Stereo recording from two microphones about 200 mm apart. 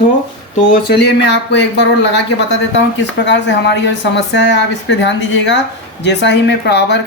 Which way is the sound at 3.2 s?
60° left (ahead or behind).